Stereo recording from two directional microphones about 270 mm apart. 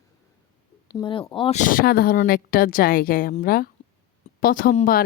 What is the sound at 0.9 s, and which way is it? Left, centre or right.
A woman's voice, centre.